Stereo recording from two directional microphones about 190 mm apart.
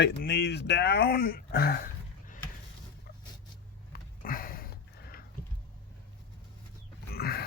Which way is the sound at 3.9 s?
50° left (ahead or behind).